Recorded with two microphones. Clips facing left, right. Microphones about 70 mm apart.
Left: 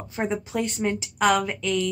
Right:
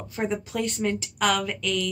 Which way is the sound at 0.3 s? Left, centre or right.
Left.